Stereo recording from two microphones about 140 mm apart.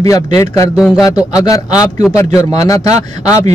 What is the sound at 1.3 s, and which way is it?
Speech, 25° left (ahead or behind).